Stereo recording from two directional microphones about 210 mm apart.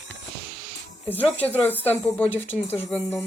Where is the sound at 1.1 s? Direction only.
10° left (ahead or behind).